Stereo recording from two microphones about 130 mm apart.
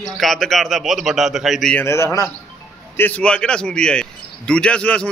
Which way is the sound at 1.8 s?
20° left (ahead or behind).